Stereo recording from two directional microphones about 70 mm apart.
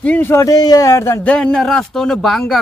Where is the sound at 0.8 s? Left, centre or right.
Left.